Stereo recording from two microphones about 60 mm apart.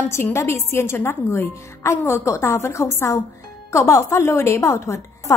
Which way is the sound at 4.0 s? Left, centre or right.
Left.